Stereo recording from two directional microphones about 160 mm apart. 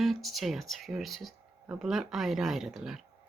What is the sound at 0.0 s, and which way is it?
Speech, centre (ahead or behind).